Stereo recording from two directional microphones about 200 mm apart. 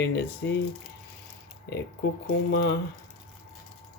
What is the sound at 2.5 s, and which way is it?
Speech, 55° left (ahead or behind).